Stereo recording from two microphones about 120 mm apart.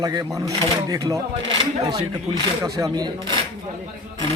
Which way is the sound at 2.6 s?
30° right (ahead or behind).